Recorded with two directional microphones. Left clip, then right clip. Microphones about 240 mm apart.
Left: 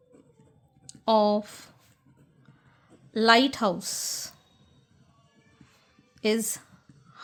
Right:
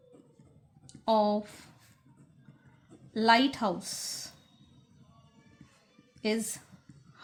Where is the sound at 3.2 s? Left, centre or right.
Left.